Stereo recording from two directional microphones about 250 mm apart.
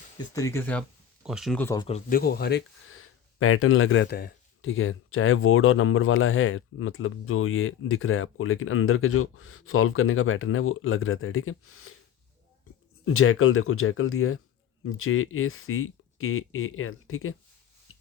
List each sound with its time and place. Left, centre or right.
0.3 s speech: centre
1.9 s speech: left
13.1 s speech: left
17.9 s a sound: left